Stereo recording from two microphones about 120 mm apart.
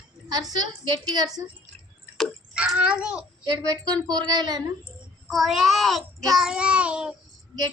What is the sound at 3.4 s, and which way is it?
Speech, 35° right (ahead or behind).